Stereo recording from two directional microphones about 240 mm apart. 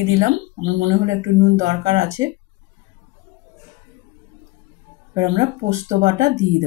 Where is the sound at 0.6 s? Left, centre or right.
Right.